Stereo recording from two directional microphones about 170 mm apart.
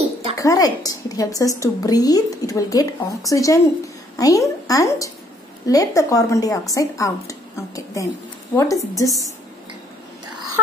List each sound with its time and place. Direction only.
0.4 s a woman's voice: 20° left (ahead or behind)